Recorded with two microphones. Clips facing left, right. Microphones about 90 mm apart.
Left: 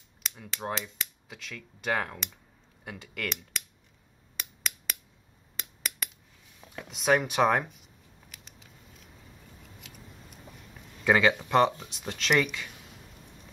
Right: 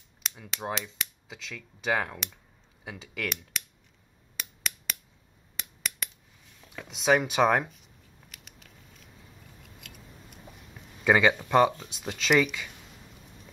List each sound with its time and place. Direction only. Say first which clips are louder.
0.2 s speech: right 1 dB; centre (ahead or behind)
4.4 s finger snapping: right 1 dB; centre (ahead or behind)
5.6 s a sound: right 1 dB; 5° left (ahead or behind)
6.6 s a sound: left 1 dB; 15° left (ahead or behind)
6.9 s speech: right 1 dB; centre (ahead or behind)
11.1 s speech: right 1 dB; 5° right (ahead or behind)